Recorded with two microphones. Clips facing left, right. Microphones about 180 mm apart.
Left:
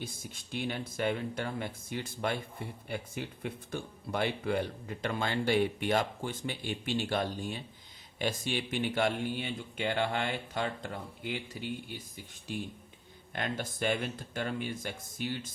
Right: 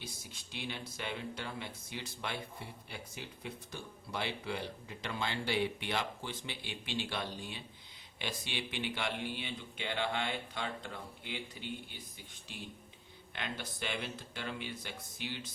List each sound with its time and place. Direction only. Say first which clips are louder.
0.0 s speech: left 6 dB; 50° left (ahead or behind)